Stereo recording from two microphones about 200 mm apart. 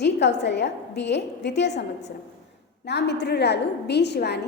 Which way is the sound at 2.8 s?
55° left (ahead or behind).